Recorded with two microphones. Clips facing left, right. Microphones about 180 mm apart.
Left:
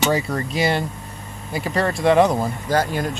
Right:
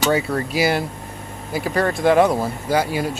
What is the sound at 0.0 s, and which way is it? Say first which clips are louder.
Speech: right 1 dB; 5° right (ahead or behind).